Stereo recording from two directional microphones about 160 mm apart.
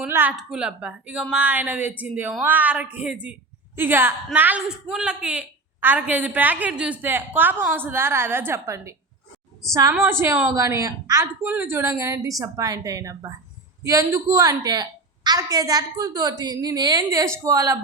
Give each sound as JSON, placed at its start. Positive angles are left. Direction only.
{"t": 0.1, "sound": "a woman's voice", "side_deg": -10}